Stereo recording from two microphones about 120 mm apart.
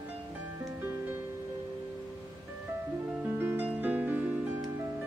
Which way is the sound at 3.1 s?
15° right (ahead or behind).